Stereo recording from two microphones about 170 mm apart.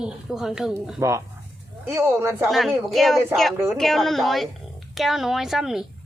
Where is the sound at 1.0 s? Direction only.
15° right (ahead or behind).